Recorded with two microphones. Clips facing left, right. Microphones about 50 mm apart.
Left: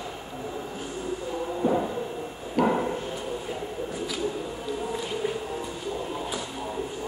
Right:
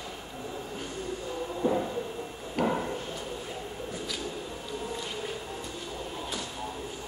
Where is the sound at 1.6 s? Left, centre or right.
Centre.